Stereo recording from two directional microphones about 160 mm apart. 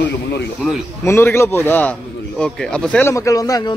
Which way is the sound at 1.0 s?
15° left (ahead or behind).